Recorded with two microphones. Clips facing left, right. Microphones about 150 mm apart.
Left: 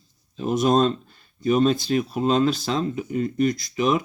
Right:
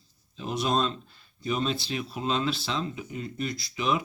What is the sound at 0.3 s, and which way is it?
Speech, 45° left (ahead or behind).